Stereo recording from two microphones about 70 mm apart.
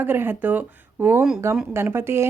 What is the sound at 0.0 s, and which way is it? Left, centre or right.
Speech, right.